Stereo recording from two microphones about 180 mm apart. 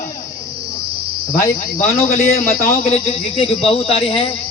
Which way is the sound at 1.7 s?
55° left (ahead or behind).